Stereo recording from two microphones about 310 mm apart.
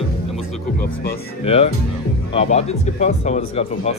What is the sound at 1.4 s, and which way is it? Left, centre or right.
Speech, centre.